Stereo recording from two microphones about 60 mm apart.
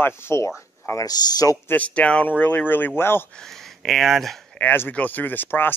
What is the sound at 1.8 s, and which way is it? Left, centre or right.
Speech, centre.